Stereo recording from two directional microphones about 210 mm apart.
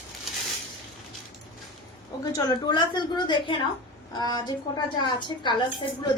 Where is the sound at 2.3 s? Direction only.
20° left (ahead or behind).